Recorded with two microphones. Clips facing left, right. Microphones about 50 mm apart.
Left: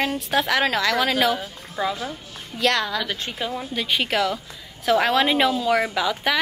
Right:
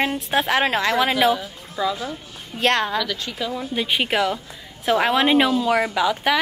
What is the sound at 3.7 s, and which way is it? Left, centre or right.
A woman's voice, centre.